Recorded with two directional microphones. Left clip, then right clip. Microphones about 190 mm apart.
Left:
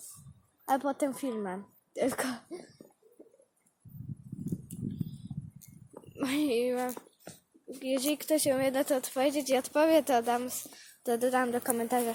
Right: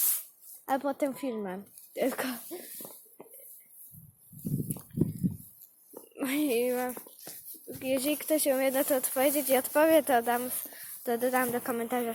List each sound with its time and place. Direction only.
0.6 s speech: 5° left (ahead or behind)
6.2 s speech: centre (ahead or behind)
6.9 s a sound: 35° right (ahead or behind)
7.8 s speech: centre (ahead or behind)